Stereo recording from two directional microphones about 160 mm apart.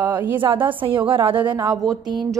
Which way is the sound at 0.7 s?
35° right (ahead or behind).